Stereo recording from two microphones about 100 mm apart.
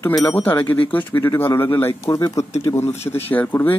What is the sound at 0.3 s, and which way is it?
Speech, 20° left (ahead or behind).